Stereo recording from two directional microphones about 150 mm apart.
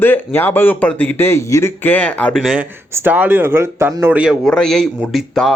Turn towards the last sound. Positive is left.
turn(degrees=0)  # may be behind; listen again after turning